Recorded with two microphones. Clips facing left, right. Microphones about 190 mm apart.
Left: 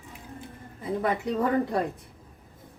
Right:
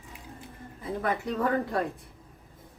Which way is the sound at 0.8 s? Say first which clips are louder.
Left 3 dB; 15° left (ahead or behind).